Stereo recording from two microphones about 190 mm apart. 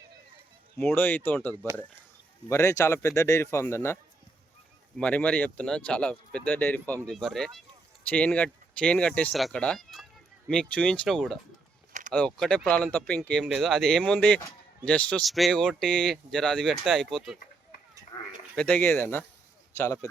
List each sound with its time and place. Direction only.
0.8 s speech: 10° left (ahead or behind)
4.9 s speech: 5° left (ahead or behind)
18.5 s speech: 5° left (ahead or behind)